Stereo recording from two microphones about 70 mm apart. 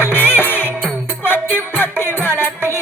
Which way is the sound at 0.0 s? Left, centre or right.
Left.